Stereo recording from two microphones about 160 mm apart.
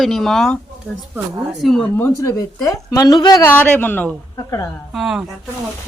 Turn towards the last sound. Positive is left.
turn(degrees=0)  # may be behind; listen again after turning